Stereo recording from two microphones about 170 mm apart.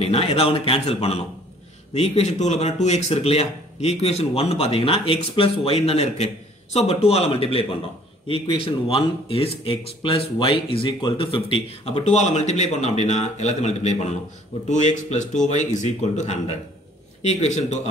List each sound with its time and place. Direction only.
0.0 s speech: 35° left (ahead or behind)